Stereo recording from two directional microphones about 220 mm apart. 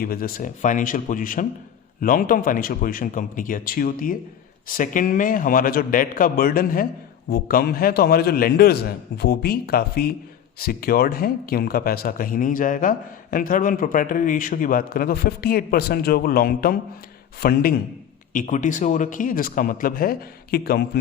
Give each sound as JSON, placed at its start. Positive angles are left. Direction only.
{"t": 0.0, "sound": "a man's voice", "side_deg": 40}